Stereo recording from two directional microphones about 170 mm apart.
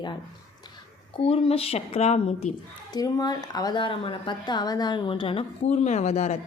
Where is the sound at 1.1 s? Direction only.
30° left (ahead or behind).